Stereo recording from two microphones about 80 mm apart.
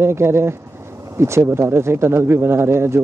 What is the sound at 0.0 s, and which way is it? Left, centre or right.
Speech, right.